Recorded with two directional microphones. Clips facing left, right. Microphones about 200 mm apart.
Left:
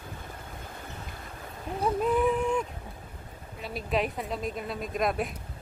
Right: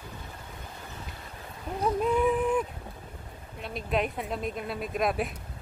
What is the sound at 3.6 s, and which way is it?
A woman's voice, centre (ahead or behind).